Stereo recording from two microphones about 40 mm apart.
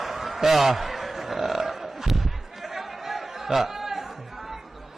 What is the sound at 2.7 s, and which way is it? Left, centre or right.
Chatter, centre.